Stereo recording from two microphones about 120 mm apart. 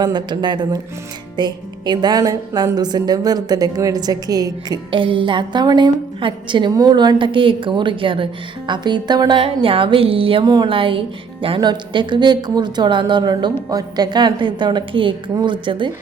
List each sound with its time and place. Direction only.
0.0 s a woman's voice: 40° right (ahead or behind)
4.9 s a woman's voice: 45° right (ahead or behind)
10.4 s a woman's voice: 35° right (ahead or behind)